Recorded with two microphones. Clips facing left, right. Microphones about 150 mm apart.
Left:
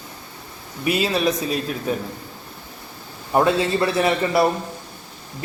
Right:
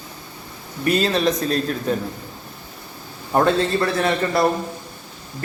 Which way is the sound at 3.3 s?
5° left (ahead or behind).